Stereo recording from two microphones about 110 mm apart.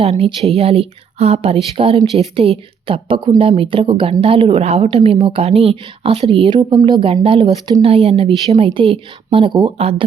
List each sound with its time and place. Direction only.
0.0 s speech: 70° right (ahead or behind)
6.7 s speech: 40° right (ahead or behind)
7.1 s speech: 55° right (ahead or behind)